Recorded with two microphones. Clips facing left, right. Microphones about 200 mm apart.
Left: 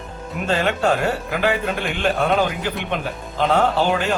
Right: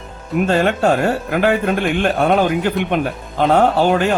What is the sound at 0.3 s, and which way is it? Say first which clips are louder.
Speech: right 6 dB; 50° right (ahead or behind).